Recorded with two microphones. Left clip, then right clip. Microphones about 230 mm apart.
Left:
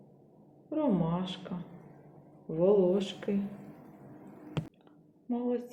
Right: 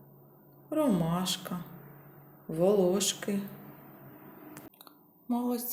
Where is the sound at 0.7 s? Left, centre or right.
Right.